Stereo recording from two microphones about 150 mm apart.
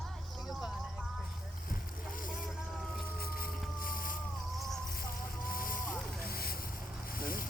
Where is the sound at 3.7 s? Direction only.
70° left (ahead or behind).